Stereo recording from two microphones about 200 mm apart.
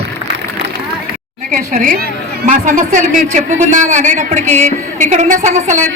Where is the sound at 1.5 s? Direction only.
40° right (ahead or behind).